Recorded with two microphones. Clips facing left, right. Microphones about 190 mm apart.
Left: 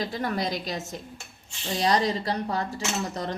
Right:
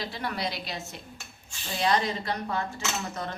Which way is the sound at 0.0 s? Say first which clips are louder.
Left 4 dB; 45° left (ahead or behind).